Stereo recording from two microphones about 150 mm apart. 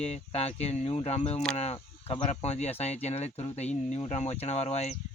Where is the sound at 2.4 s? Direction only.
45° left (ahead or behind).